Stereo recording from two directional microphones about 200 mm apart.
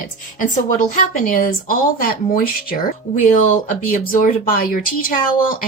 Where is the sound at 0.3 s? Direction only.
40° left (ahead or behind).